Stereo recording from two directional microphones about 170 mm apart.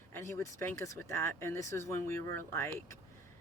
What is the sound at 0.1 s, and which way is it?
Speech, 15° left (ahead or behind).